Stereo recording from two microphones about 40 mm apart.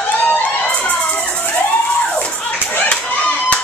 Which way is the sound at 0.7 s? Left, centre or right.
Left.